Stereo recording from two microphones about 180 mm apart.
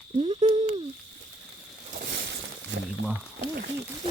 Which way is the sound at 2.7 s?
90° right.